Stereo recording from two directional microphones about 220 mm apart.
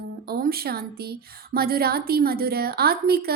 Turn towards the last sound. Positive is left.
turn(degrees=-45)  # may be behind; listen again after turning